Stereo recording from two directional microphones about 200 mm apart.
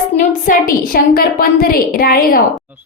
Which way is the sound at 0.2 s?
40° left (ahead or behind).